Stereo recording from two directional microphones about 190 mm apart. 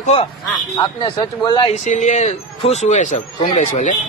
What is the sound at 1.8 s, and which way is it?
Speech, 40° left (ahead or behind).